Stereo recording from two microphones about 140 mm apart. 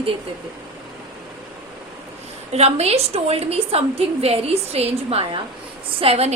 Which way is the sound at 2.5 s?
50° right (ahead or behind).